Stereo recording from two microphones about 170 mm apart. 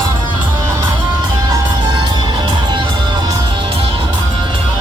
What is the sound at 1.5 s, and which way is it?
Music, 25° right (ahead or behind).